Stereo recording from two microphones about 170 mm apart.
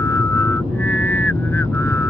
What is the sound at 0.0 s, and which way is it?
Vehicle, 15° left (ahead or behind).